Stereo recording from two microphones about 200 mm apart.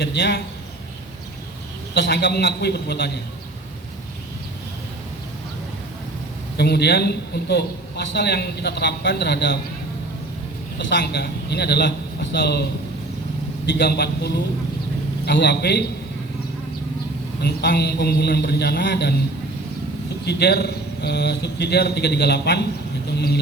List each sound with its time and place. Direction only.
0.0 s a man's voice: 60° left (ahead or behind)
2.0 s a man's voice: 60° left (ahead or behind)
6.6 s a man's voice: 55° left (ahead or behind)
10.8 s a man's voice: 60° left (ahead or behind)
13.7 s a man's voice: 55° left (ahead or behind)
17.4 s a man's voice: 55° left (ahead or behind)
20.2 s a man's voice: 55° left (ahead or behind)